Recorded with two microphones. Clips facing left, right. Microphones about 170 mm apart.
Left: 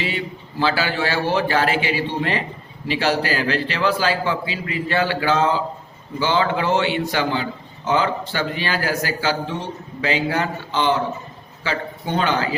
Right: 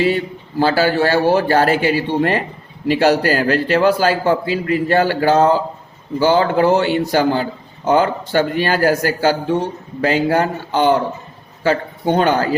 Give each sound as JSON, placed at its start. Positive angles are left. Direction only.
{"t": 0.0, "sound": "a man's voice", "side_deg": -45}